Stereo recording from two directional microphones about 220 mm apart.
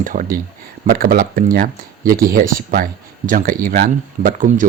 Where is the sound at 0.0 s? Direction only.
40° right (ahead or behind).